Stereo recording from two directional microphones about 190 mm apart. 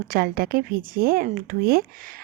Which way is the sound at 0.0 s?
50° right (ahead or behind).